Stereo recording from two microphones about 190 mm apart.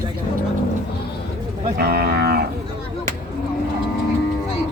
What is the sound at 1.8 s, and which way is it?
Speech, 55° right (ahead or behind).